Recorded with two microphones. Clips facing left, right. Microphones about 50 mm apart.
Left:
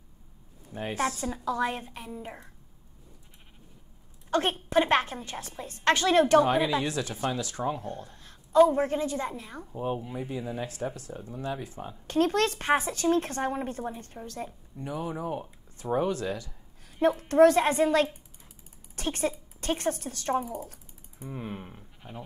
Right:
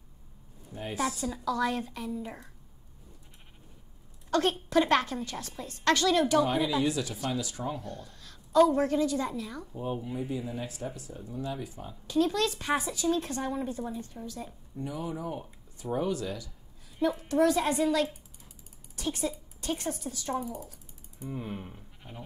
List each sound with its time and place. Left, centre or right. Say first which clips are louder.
0.9 s a woman's voice: left 1 dB; left
4.3 s a woman's voice: even; left
7.8 s a woman's voice: left 4 dB; left
10.1 s speech: even; left
21.5 s speech: even; left